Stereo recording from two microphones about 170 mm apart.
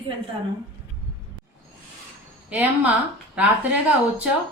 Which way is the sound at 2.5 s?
10° right (ahead or behind).